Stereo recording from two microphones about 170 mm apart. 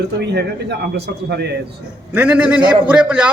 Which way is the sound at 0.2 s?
80° right.